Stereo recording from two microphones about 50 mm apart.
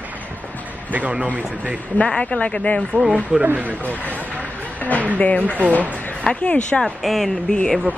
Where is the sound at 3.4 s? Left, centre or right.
Right.